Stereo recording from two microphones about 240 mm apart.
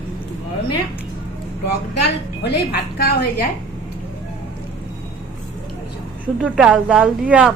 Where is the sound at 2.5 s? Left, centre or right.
Left.